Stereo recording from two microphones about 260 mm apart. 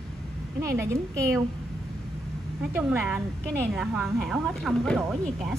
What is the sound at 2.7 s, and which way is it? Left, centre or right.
A woman's voice, centre.